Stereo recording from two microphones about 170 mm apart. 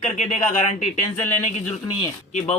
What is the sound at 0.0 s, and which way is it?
Speech, 45° left (ahead or behind).